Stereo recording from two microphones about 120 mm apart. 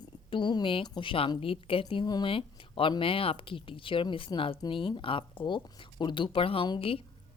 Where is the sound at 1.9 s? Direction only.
40° left (ahead or behind).